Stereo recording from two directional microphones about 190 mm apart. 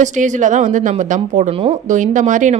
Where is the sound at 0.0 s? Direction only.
40° right (ahead or behind).